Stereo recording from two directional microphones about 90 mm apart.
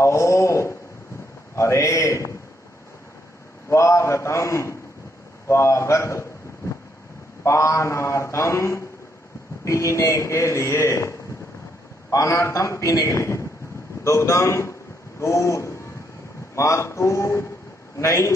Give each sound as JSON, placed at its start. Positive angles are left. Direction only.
{"t": 0.0, "sound": "a man's voice", "side_deg": 30}
{"t": 3.6, "sound": "a man's voice", "side_deg": 30}
{"t": 7.4, "sound": "a man's voice", "side_deg": 35}